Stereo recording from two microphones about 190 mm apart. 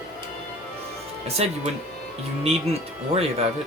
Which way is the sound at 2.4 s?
35° right (ahead or behind).